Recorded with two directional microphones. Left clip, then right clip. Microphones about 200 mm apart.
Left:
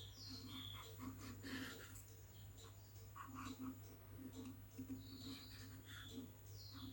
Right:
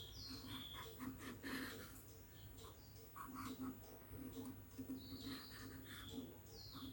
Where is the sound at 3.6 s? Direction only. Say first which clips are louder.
Right 2 dB; 5° right (ahead or behind).